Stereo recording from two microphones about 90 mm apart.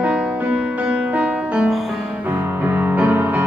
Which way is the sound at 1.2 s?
15° right (ahead or behind).